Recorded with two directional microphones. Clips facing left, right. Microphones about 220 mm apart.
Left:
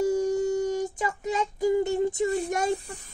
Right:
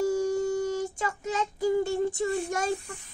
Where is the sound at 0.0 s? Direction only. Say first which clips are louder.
Left 2 dB; 20° left (ahead or behind).